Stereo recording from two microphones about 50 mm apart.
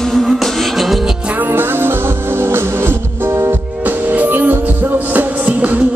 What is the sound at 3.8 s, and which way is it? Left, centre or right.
Music, right.